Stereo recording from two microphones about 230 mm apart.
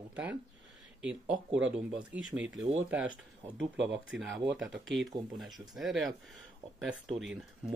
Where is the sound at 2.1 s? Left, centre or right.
Centre.